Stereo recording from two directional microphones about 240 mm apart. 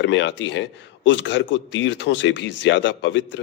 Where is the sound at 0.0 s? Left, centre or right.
Left.